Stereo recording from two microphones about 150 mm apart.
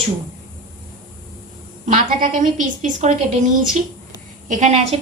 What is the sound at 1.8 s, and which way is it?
A woman's voice, 60° right (ahead or behind).